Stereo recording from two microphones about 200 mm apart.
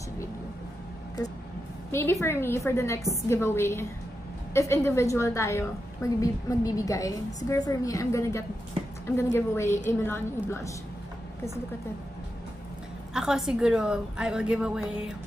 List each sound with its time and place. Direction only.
1.9 s a woman's voice: 10° left (ahead or behind)
9.7 s a woman's voice: 35° left (ahead or behind)
10.0 s a woman's voice: 10° left (ahead or behind)
13.1 s a woman's voice: 5° right (ahead or behind)